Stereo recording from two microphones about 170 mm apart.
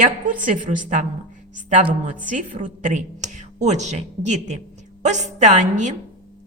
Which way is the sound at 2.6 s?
50° right (ahead or behind).